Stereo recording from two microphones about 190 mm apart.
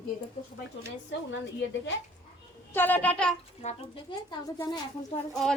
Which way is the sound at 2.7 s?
10° left (ahead or behind).